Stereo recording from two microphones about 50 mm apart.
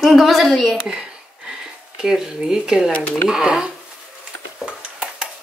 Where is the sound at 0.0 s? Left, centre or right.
Centre.